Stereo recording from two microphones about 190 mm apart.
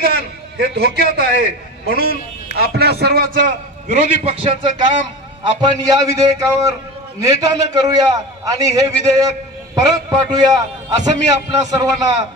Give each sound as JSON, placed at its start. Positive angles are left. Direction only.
{"t": 0.0, "sound": "a man's voice", "side_deg": -60}
{"t": 3.3, "sound": "a man's voice", "side_deg": -40}